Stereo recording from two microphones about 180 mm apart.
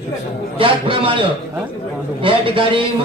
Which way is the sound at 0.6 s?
30° right (ahead or behind).